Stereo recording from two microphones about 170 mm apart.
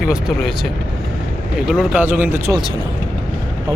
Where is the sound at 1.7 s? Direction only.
10° right (ahead or behind).